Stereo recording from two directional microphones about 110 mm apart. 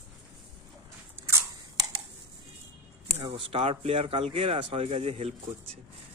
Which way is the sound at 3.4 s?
60° right (ahead or behind).